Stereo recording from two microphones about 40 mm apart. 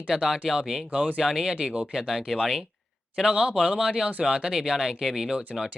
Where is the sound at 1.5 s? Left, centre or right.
Centre.